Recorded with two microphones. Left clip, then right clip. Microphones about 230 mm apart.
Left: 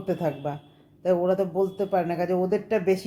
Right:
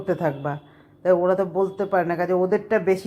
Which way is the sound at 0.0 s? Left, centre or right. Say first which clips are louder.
Right 3 dB; centre.